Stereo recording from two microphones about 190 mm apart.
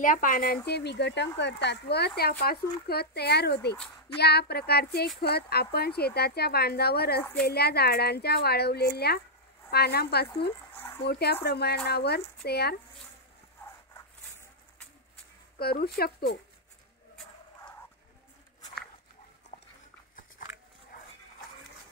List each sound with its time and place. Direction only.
0.0 s speech: 45° left (ahead or behind)
0.7 s speech: 60° left (ahead or behind)
15.6 s speech: 55° left (ahead or behind)
19.5 s dog: 30° left (ahead or behind)